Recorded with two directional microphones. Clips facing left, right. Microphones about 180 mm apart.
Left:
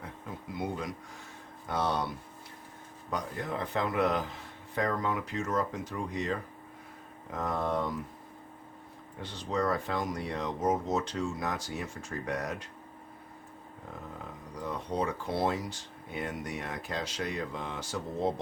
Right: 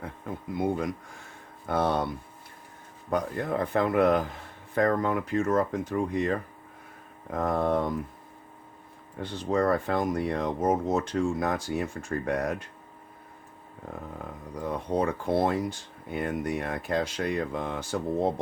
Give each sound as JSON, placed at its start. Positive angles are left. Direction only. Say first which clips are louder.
{"t": 0.5, "sound": "speech", "louder": "right 7 dB", "side_deg": -55}
{"t": 3.1, "sound": "speech", "louder": "right 7 dB", "side_deg": -55}
{"t": 9.2, "sound": "speech", "louder": "right 6 dB", "side_deg": -55}
{"t": 14.8, "sound": "speech", "louder": "right 6 dB", "side_deg": -55}